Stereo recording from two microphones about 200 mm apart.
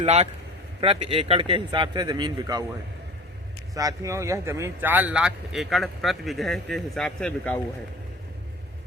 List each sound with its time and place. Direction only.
0.0 s a man's voice: 30° right (ahead or behind)
3.8 s speech: 15° right (ahead or behind); by 7.6 s 5° left (ahead or behind)